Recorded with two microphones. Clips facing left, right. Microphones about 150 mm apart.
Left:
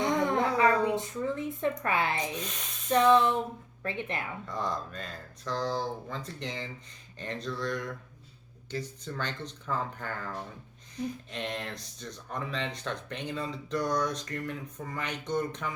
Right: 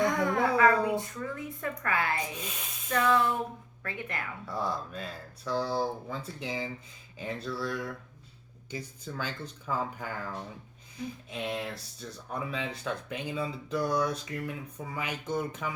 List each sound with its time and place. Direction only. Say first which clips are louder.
0.0 s a sound: even; 20° left (ahead or behind)
0.9 s speech: left 3 dB; 20° left (ahead or behind)
2.1 s speech: left 2 dB; 5° right (ahead or behind)
2.9 s speech: left 4 dB; 25° left (ahead or behind)
4.4 s speech: right 2 dB; 5° right (ahead or behind)
11.3 s speech: right 2 dB; 5° right (ahead or behind)